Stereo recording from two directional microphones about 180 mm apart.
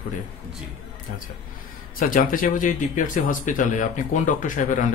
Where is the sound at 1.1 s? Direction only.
45° left (ahead or behind).